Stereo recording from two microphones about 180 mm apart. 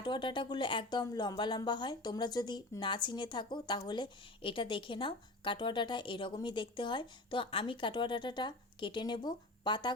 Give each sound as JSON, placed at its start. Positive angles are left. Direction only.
{"t": 0.0, "sound": "speech", "side_deg": 25}